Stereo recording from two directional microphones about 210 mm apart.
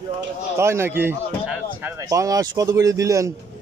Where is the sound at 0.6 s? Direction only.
10° right (ahead or behind).